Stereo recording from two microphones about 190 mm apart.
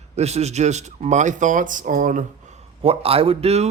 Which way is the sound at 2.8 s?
30° right (ahead or behind).